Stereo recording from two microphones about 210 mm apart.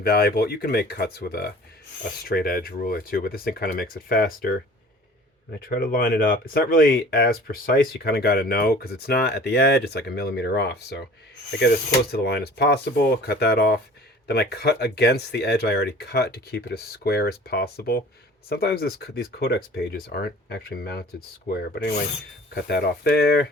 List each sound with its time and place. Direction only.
0.0 s speech: 45° left (ahead or behind)
5.5 s speech: 45° left (ahead or behind)
12.1 s speech: 50° left (ahead or behind)